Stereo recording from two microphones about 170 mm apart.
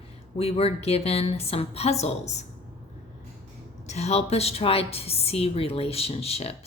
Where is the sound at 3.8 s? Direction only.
40° left (ahead or behind).